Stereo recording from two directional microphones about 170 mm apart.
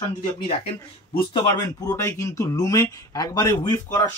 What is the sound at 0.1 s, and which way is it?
Speech, 25° left (ahead or behind).